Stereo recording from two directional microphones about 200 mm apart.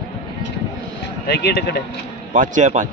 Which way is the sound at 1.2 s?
55° left (ahead or behind).